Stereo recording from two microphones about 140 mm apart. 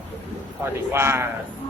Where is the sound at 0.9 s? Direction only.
15° right (ahead or behind).